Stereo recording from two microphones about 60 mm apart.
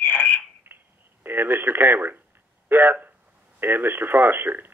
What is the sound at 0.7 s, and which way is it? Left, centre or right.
Telephone, right.